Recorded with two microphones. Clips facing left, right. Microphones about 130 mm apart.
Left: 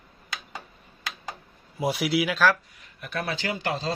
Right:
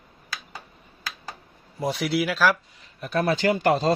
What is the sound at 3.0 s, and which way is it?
Speech, 40° right (ahead or behind).